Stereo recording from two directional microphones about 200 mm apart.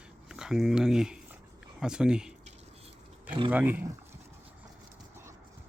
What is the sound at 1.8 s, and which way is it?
Speech, 5° right (ahead or behind).